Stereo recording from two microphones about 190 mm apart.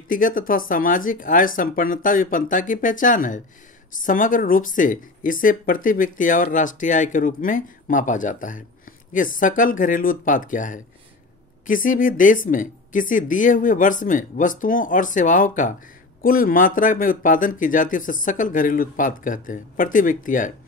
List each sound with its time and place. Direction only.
0.1 s speech: 45° left (ahead or behind)